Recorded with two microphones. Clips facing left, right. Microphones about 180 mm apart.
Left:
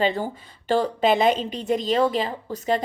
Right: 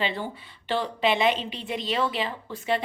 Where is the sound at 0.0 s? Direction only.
45° left (ahead or behind).